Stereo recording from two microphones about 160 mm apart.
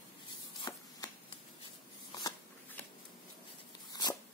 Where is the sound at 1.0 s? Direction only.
20° left (ahead or behind).